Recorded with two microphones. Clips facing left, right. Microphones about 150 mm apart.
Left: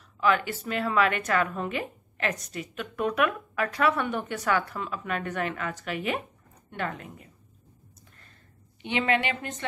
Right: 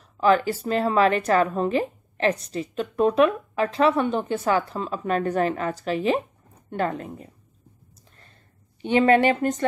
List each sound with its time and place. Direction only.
0.2 s a woman's voice: 35° right (ahead or behind)
8.8 s a woman's voice: 40° right (ahead or behind)